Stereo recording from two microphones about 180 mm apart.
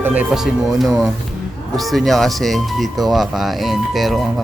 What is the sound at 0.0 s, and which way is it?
Speech, 10° right (ahead or behind).